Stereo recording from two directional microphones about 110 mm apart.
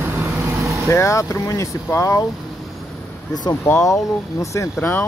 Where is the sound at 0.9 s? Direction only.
25° left (ahead or behind).